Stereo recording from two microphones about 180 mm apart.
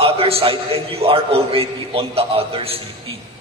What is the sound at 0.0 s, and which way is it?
A man's voice, 30° right (ahead or behind).